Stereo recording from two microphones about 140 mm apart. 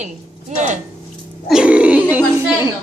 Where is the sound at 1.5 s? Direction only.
5° right (ahead or behind).